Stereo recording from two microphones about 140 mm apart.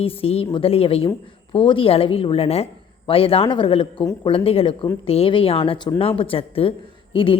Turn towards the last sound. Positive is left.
turn(degrees=40)  # may be behind; listen again after turning